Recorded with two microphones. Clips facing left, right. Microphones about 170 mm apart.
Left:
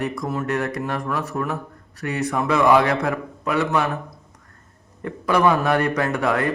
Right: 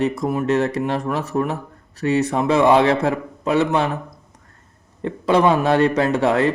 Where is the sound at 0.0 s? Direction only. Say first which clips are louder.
Right 5 dB; 20° right (ahead or behind).